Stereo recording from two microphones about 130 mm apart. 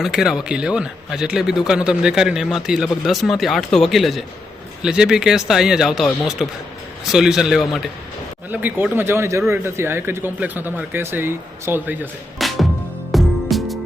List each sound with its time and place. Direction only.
0.0 s speech: 5° right (ahead or behind)
8.4 s speech: 15° right (ahead or behind)
12.4 s music: centre (ahead or behind)